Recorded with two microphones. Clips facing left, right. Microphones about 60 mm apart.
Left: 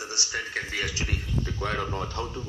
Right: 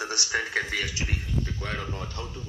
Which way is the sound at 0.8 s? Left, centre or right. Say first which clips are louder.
Left 1 dB; left.